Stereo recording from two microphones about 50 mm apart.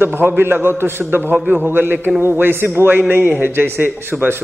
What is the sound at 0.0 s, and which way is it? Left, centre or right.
A man's voice, right.